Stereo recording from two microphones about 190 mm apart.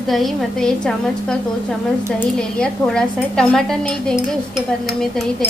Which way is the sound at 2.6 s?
5° left (ahead or behind).